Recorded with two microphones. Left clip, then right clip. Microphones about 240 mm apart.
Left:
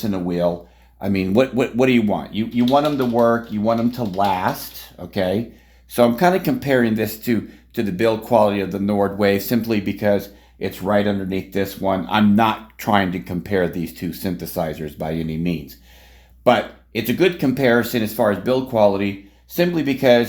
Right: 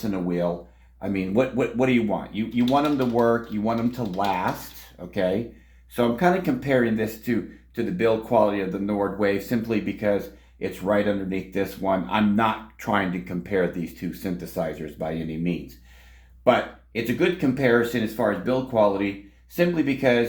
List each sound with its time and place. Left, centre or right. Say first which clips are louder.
0.1 s speech: left 5 dB; left
5.9 s speech: left 6 dB; left